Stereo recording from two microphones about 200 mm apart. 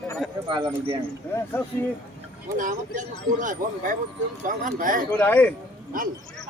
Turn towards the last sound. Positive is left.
turn(degrees=10)  # may be behind; listen again after turning